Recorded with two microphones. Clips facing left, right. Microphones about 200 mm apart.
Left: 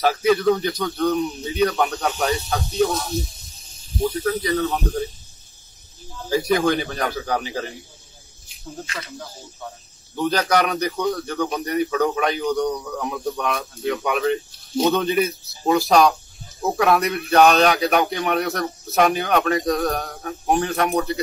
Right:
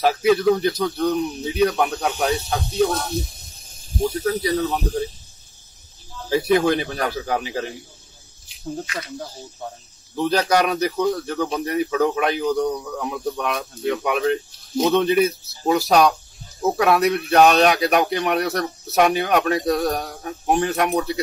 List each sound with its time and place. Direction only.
0.0 s speech: 5° right (ahead or behind)
2.9 s snake: 55° right (ahead or behind)
4.2 s speech: 10° right (ahead or behind)
6.3 s speech: 5° right (ahead or behind)
10.1 s speech: 5° right (ahead or behind)